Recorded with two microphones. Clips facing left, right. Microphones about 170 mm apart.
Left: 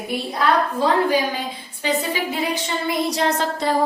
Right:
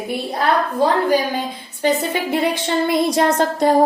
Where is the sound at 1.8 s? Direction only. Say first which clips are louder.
Right 4 dB; 50° right (ahead or behind).